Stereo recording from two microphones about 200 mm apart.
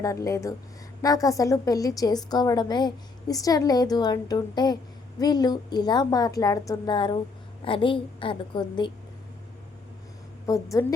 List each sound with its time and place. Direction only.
0.0 s a woman's voice: 15° left (ahead or behind)
10.4 s speech: 15° left (ahead or behind)